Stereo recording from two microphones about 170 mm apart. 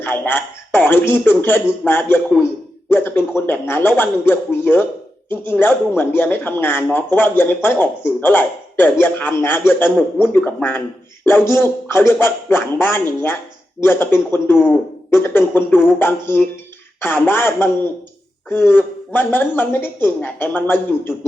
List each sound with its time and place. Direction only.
0.0 s a man's voice: 10° left (ahead or behind)